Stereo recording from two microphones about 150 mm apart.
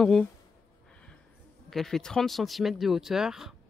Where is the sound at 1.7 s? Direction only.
Centre (ahead or behind).